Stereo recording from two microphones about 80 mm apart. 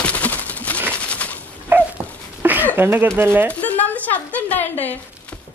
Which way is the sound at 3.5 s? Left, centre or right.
Left.